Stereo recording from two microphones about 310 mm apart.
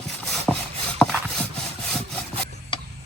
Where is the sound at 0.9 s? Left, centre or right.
Centre.